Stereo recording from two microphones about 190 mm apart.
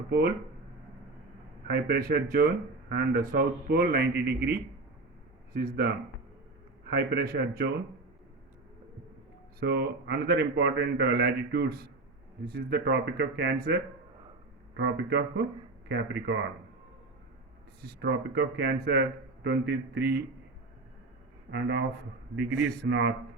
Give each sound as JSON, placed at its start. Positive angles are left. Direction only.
{"t": 1.6, "sound": "speech", "side_deg": -55}
{"t": 5.5, "sound": "speech", "side_deg": -55}
{"t": 6.9, "sound": "speech", "side_deg": -55}
{"t": 9.6, "sound": "speech", "side_deg": -60}
{"t": 14.8, "sound": "speech", "side_deg": -65}
{"t": 17.8, "sound": "speech", "side_deg": -60}
{"t": 21.5, "sound": "speech", "side_deg": -60}